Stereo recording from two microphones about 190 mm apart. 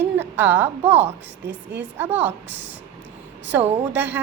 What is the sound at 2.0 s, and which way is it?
Speech, 10° right (ahead or behind).